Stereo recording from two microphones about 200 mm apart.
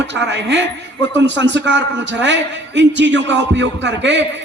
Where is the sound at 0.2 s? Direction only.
60° right (ahead or behind).